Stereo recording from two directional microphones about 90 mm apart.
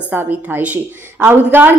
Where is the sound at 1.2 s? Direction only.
25° right (ahead or behind).